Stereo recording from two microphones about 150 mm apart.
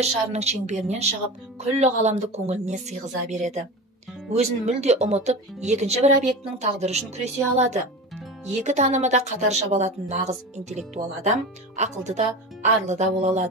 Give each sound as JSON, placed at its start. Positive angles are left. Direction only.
{"t": 0.0, "sound": "speech", "side_deg": -45}